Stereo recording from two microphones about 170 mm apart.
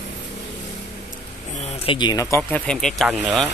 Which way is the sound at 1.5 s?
35° left (ahead or behind).